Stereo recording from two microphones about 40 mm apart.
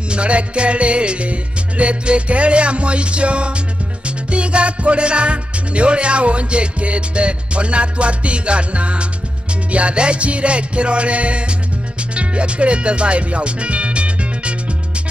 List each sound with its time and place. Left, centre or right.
0.1 s music: right
12.2 s speech: right